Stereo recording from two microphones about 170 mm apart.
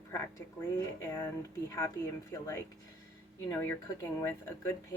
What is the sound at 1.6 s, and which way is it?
Speech, 15° left (ahead or behind).